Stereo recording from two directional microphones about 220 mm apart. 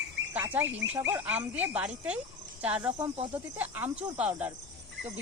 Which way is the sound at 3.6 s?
10° right (ahead or behind).